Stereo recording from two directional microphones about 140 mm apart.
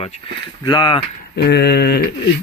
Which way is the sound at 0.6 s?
30° left (ahead or behind).